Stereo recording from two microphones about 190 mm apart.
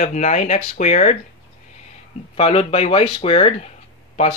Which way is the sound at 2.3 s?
30° left (ahead or behind).